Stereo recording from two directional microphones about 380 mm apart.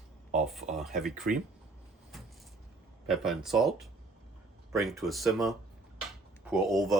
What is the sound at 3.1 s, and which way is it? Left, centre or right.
Speech, centre.